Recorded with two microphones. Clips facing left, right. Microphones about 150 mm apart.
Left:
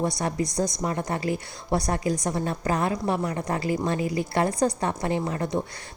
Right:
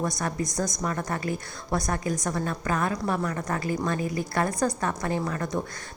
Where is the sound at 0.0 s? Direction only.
30° left (ahead or behind).